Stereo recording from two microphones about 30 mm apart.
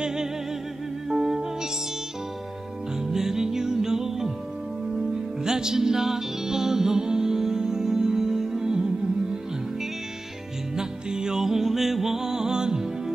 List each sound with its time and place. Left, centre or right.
0.0 s a sound: centre
1.0 s music: centre
3.0 s music: centre
5.4 s music: right
10.8 s music: right